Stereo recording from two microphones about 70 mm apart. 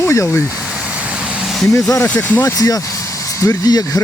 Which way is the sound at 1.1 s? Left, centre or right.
Centre.